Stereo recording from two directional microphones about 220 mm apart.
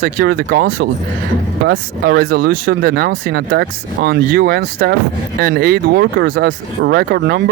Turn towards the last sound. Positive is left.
turn(degrees=-45)  # may be behind; listen again after turning